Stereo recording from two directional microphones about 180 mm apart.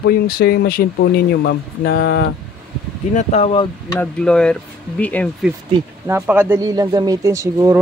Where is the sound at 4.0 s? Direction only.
5° left (ahead or behind).